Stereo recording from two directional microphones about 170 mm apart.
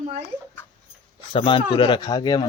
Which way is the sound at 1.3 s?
30° left (ahead or behind).